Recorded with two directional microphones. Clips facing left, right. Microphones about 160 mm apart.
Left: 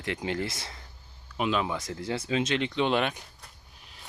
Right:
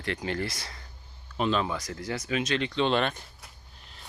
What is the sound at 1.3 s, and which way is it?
Speech, 10° left (ahead or behind).